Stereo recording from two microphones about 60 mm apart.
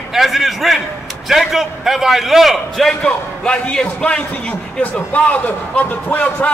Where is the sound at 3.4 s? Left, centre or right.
Centre.